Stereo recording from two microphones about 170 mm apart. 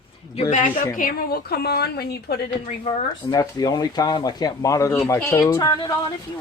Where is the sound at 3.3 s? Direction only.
20° left (ahead or behind).